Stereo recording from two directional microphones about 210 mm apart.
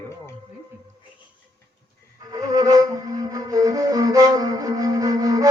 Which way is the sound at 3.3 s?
15° right (ahead or behind).